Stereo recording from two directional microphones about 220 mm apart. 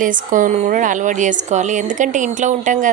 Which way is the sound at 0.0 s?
35° right (ahead or behind).